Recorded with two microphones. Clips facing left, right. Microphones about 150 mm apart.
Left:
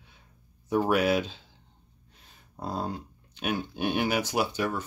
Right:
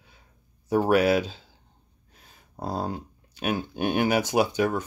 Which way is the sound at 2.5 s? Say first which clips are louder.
Right 3 dB; 35° right (ahead or behind).